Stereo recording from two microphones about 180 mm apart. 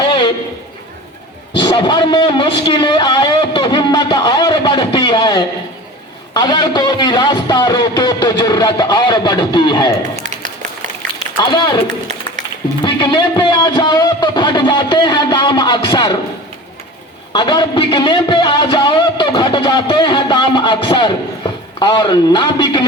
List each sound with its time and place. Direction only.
0.1 s a sound: 25° left (ahead or behind)
1.5 s a man's voice: 25° left (ahead or behind)
10.2 s music: 40° right (ahead or behind)
11.3 s a man's voice: 25° left (ahead or behind)
12.8 s a man's voice: 25° left (ahead or behind)
17.3 s a man's voice: 25° left (ahead or behind)